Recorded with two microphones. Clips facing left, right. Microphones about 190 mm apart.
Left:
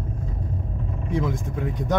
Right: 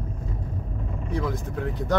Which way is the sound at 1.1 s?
20° left (ahead or behind).